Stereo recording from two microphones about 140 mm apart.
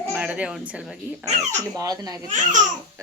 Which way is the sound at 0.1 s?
10° right (ahead or behind).